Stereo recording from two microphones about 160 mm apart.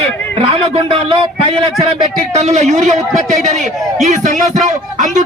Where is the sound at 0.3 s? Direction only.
35° right (ahead or behind).